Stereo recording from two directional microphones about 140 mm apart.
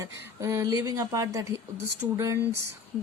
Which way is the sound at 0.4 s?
25° right (ahead or behind).